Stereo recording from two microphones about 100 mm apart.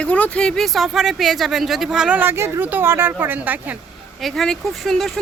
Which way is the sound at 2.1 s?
25° right (ahead or behind).